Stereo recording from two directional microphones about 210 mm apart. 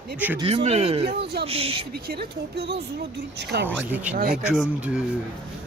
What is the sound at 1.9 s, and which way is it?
Speech, 50° right (ahead or behind).